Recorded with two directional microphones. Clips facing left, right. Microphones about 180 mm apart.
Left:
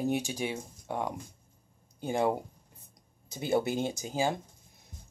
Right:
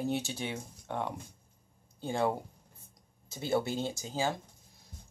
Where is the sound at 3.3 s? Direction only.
20° left (ahead or behind).